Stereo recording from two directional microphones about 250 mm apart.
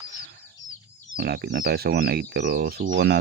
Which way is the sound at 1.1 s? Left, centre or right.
Right.